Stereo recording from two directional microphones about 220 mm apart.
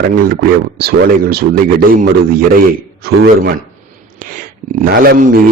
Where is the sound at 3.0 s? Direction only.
40° right (ahead or behind).